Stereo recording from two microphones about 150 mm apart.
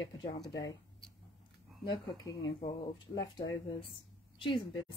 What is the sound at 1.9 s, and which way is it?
Speech, 25° left (ahead or behind).